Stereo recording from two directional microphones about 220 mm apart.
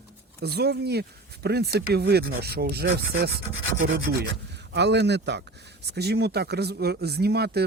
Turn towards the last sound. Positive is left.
turn(degrees=-45)  # may be behind; listen again after turning